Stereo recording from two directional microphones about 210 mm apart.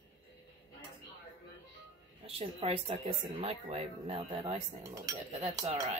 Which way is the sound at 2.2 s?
30° right (ahead or behind).